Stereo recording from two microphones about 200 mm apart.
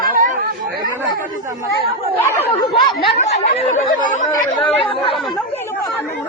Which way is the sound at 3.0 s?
30° left (ahead or behind).